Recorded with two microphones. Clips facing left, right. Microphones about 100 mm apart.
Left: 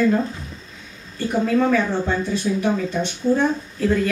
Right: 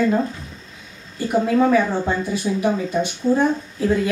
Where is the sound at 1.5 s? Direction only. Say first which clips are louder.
Right 2 dB; 15° right (ahead or behind).